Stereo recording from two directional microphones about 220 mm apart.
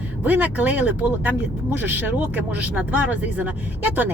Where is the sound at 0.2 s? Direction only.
5° right (ahead or behind).